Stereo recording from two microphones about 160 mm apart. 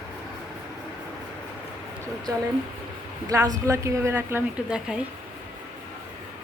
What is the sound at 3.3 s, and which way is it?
A woman's voice, 20° right (ahead or behind).